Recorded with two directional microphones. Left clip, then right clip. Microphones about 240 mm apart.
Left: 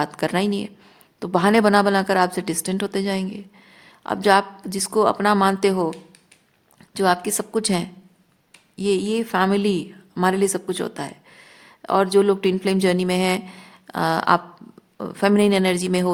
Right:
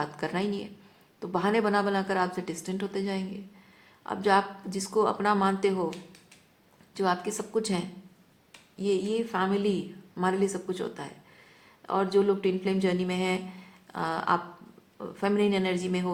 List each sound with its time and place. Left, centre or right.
0.0 s a woman's voice: left
6.9 s a woman's voice: left